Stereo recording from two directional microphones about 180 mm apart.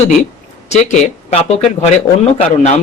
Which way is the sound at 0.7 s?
40° left (ahead or behind).